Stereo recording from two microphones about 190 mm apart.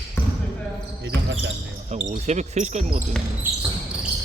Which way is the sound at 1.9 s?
35° right (ahead or behind).